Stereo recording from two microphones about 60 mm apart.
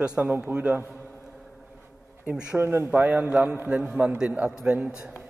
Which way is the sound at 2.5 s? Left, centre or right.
Right.